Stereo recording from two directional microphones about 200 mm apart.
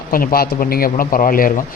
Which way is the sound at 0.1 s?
45° left (ahead or behind).